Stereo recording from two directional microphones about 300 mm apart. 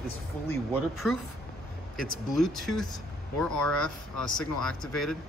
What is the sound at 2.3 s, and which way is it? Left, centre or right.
Speech, centre.